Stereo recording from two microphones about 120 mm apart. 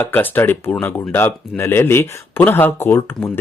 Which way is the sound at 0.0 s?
15° left (ahead or behind).